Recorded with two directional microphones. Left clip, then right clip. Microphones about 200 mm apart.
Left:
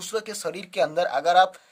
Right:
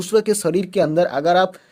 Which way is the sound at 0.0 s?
35° right (ahead or behind).